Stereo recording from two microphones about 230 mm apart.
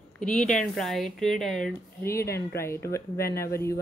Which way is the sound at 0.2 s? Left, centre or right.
Centre.